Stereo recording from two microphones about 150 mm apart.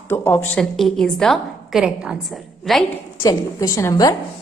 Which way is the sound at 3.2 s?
20° left (ahead or behind).